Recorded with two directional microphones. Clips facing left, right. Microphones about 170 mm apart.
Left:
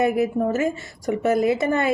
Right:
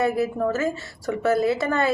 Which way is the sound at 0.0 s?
15° left (ahead or behind).